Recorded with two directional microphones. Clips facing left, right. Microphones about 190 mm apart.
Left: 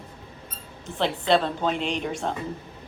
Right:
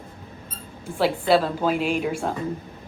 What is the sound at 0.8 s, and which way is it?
Speech, 5° right (ahead or behind).